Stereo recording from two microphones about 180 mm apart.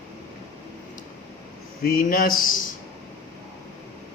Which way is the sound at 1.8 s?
50° left (ahead or behind).